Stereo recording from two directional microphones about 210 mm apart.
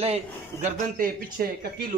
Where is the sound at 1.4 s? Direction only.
45° right (ahead or behind).